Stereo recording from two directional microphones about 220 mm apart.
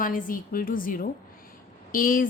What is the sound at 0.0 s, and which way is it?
Speech, 40° left (ahead or behind).